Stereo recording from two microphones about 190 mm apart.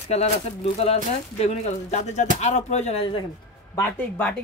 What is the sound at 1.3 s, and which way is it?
Speech, 35° left (ahead or behind).